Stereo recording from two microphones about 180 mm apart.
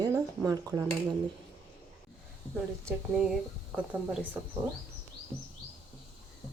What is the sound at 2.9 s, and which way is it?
Speech, 5° right (ahead or behind).